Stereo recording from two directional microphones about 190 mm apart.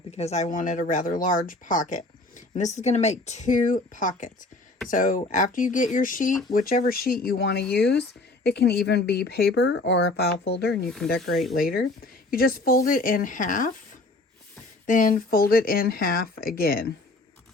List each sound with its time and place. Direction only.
0.1 s speech: 35° left (ahead or behind); by 9.6 s 55° left (ahead or behind)
9.6 s speech: 80° left; by 10.8 s 55° left (ahead or behind)
10.8 s speech: centre (ahead or behind)
11.5 s speech: 50° left (ahead or behind)
14.8 s speech: 45° left (ahead or behind)